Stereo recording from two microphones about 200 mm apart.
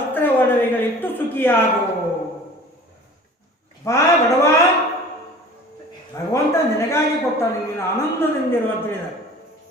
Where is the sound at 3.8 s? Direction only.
15° left (ahead or behind).